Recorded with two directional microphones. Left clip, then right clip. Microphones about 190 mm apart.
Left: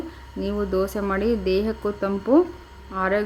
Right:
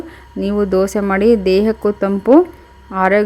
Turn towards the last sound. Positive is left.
turn(degrees=-35)  # may be behind; listen again after turning